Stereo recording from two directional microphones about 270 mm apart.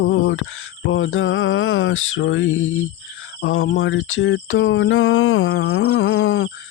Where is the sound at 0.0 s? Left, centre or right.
Left.